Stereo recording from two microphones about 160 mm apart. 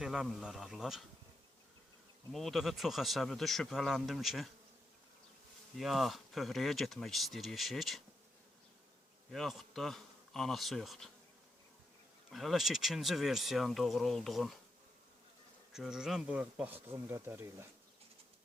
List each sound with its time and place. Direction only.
0.0 s speech: centre (ahead or behind)
2.3 s speech: centre (ahead or behind)
5.7 s speech: centre (ahead or behind)
9.3 s speech: centre (ahead or behind)
12.3 s speech: centre (ahead or behind)
15.7 s speech: 5° right (ahead or behind)